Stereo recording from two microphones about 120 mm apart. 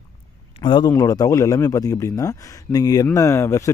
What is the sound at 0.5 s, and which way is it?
Speech, 45° left (ahead or behind).